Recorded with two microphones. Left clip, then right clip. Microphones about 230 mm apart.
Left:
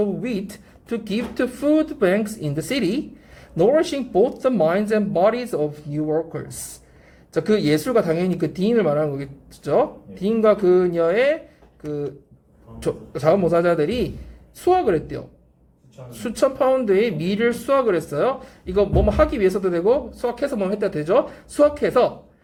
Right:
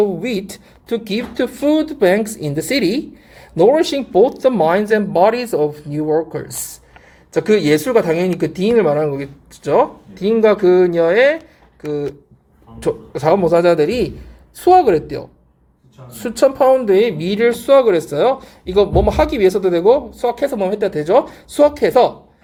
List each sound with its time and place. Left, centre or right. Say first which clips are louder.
0.0 s speech: right 7 dB; right
16.2 s speech: right 6 dB; centre